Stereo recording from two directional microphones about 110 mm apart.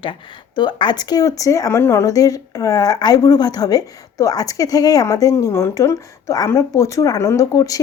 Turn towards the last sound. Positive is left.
turn(degrees=30)  # may be behind; listen again after turning